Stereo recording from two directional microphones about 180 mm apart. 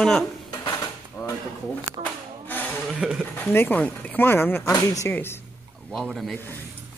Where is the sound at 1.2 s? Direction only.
20° left (ahead or behind).